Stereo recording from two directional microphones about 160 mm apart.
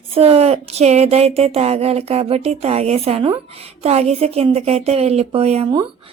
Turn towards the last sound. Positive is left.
turn(degrees=-40)  # may be behind; listen again after turning